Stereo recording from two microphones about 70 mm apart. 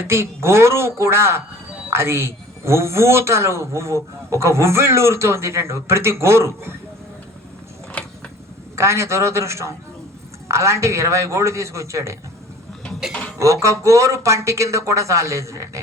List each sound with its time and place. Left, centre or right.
0.0 s a man's voice: right
8.7 s a man's voice: right
13.4 s speech: right